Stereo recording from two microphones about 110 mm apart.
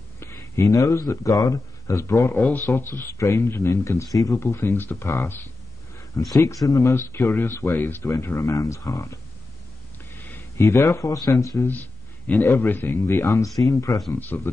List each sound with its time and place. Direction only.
0.2 s speech: 25° left (ahead or behind)
11.7 s a man's voice: 15° left (ahead or behind)
14.2 s speech: 15° left (ahead or behind)